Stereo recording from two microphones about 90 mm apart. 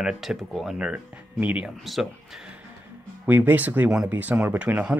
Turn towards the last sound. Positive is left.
turn(degrees=-15)  # may be behind; listen again after turning